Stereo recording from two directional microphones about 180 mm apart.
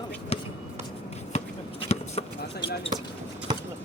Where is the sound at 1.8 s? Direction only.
35° left (ahead or behind).